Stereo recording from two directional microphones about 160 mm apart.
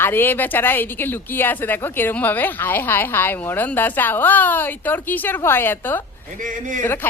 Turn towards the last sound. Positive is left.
turn(degrees=15)  # may be behind; listen again after turning